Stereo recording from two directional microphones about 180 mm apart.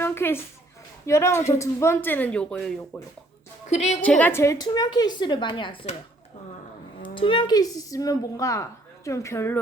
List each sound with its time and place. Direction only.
0.0 s a sound: 15° left (ahead or behind)
1.0 s speech: 15° left (ahead or behind)
3.7 s a woman's voice: 40° left (ahead or behind)
4.0 s a woman's voice: 10° left (ahead or behind); by 5.7 s 25° left (ahead or behind)
7.0 s a woman's voice: 30° left (ahead or behind)